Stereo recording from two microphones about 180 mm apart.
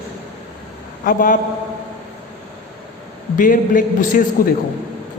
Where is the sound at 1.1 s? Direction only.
50° left (ahead or behind).